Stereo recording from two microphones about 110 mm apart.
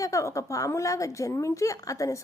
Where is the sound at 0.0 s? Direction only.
30° left (ahead or behind).